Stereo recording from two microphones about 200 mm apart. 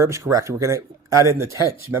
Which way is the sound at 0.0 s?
15° right (ahead or behind).